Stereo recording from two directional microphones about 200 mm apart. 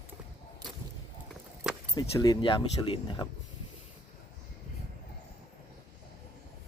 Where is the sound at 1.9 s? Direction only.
20° left (ahead or behind).